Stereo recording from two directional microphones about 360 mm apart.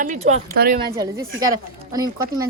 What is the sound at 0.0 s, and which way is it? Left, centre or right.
Speech, centre.